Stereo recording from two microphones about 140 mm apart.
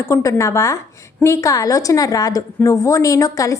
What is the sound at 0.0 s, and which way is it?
A woman's voice, 20° left (ahead or behind).